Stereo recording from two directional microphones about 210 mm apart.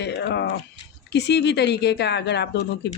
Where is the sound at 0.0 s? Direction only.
55° left (ahead or behind).